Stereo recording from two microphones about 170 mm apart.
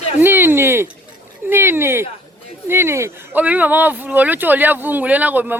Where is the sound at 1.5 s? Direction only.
15° right (ahead or behind).